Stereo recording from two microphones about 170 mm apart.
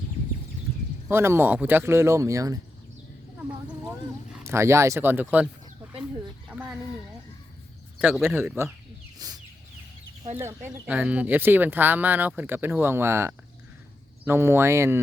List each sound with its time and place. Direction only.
1.1 s speech: 15° right (ahead or behind)
3.8 s speech: 15° right (ahead or behind)
6.5 s speech: 10° right (ahead or behind)
7.9 s speech: 5° right (ahead or behind)
8.3 s speech: 15° right (ahead or behind)
9.1 s chicken: 20° right (ahead or behind)
10.3 s speech: 15° right (ahead or behind)